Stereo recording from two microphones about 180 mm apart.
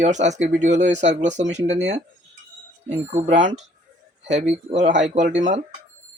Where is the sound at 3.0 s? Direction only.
40° right (ahead or behind).